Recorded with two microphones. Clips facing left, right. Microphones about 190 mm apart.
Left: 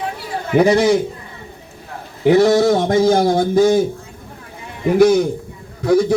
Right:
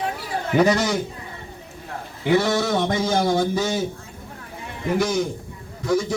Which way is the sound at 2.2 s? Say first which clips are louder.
Left 8 dB; 45° left (ahead or behind).